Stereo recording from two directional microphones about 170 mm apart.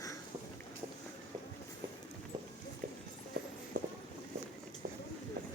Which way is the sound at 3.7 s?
55° right (ahead or behind).